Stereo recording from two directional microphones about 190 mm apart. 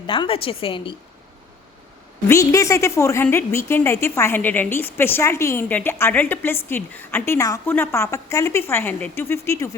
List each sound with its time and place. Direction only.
0.1 s a woman's voice: 30° left (ahead or behind)
2.2 s a woman's voice: 15° left (ahead or behind)